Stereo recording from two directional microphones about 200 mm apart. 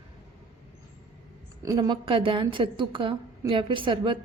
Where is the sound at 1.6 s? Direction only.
20° right (ahead or behind).